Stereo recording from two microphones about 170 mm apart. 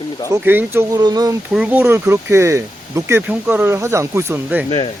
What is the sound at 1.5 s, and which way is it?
Speech, 10° right (ahead or behind).